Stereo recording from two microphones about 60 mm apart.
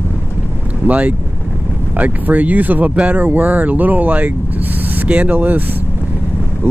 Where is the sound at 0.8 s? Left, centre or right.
Right.